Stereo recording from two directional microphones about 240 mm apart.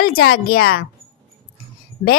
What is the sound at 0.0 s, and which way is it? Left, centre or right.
Speech, left.